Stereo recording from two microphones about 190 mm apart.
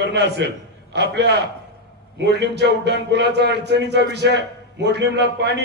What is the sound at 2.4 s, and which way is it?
A man's voice, 65° right (ahead or behind).